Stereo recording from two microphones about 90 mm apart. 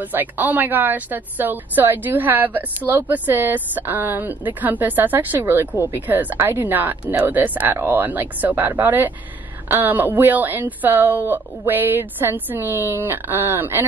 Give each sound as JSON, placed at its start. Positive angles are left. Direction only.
{"t": 0.0, "sound": "speech", "side_deg": -20}